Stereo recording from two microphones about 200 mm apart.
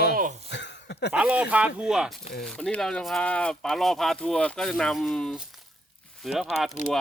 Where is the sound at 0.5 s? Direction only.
60° left (ahead or behind).